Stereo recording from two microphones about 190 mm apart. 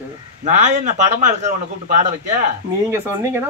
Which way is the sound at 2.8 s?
15° right (ahead or behind).